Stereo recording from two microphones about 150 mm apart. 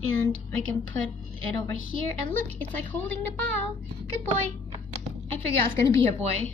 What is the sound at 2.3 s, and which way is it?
A woman's voice, 10° left (ahead or behind).